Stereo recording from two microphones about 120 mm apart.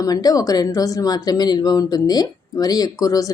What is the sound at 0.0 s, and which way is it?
Speech, 30° left (ahead or behind).